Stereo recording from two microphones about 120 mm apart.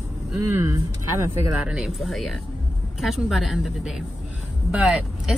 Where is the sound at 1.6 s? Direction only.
5° right (ahead or behind).